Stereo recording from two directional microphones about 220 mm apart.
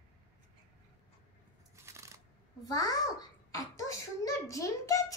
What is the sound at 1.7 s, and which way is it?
Scissors, 15° right (ahead or behind).